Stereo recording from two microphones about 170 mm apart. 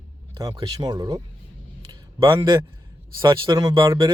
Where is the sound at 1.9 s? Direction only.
20° right (ahead or behind).